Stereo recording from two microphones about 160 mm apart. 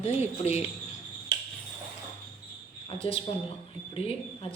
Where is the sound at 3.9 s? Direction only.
35° left (ahead or behind).